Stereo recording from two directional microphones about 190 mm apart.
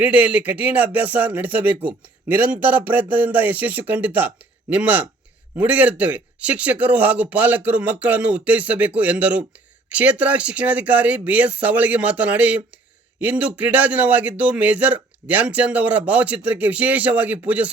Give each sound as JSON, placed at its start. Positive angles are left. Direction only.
{"t": 0.0, "sound": "speech", "side_deg": -10}